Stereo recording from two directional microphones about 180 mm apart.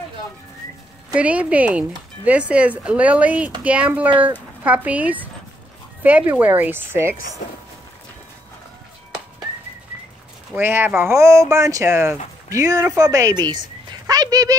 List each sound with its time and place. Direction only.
1.1 s speech: 5° right (ahead or behind)
10.5 s speech: 10° right (ahead or behind)
13.8 s a sound: 20° right (ahead or behind)